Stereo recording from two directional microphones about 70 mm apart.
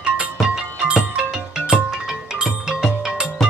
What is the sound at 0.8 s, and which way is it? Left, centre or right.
Music, centre.